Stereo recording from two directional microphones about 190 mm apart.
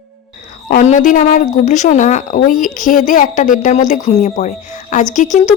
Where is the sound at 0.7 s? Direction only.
40° left (ahead or behind).